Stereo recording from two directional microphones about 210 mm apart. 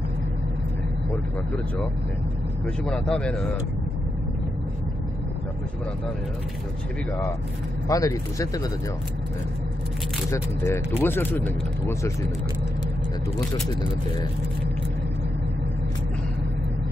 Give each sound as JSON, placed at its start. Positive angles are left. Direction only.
{"t": 2.6, "sound": "speech", "side_deg": 5}
{"t": 7.9, "sound": "speech", "side_deg": 15}
{"t": 10.3, "sound": "speech", "side_deg": 10}